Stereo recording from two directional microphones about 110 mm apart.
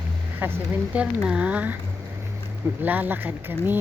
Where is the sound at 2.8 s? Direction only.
15° right (ahead or behind).